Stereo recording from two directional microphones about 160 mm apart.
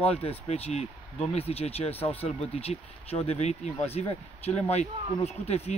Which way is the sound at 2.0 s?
10° left (ahead or behind).